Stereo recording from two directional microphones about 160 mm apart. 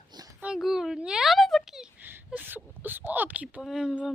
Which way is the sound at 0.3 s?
5° right (ahead or behind).